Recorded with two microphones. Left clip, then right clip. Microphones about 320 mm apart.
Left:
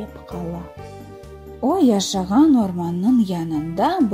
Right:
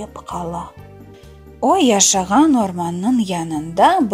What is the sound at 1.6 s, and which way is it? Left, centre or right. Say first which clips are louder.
Speech: right 5 dB; right.